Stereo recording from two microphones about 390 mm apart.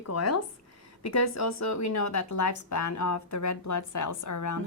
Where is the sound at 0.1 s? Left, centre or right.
Left.